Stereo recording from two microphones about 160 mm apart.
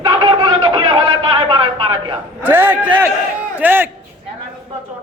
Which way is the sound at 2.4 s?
10° right (ahead or behind).